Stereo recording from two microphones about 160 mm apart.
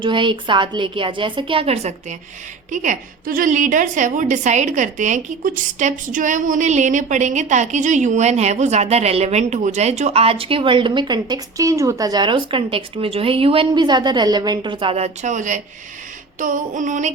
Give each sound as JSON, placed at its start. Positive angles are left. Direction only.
{"t": 0.0, "sound": "a woman's voice", "side_deg": -30}
{"t": 2.7, "sound": "a woman's voice", "side_deg": -55}